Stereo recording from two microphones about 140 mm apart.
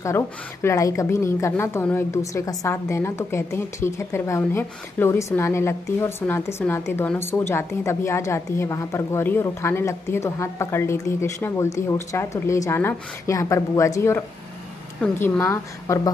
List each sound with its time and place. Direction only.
0.0 s a woman's voice: 20° left (ahead or behind)